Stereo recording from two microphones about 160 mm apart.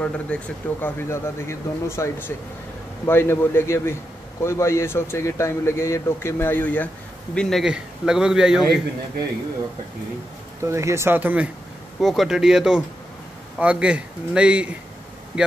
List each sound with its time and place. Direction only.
0.0 s a man's voice: 10° left (ahead or behind)
10.6 s speech: 20° right (ahead or behind)
12.0 s a man's voice: centre (ahead or behind)